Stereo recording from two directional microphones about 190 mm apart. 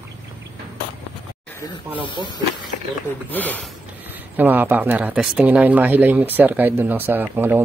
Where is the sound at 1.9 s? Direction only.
25° left (ahead or behind).